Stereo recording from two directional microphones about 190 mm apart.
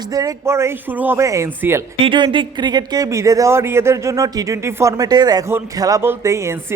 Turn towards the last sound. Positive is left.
turn(degrees=-15)  # may be behind; listen again after turning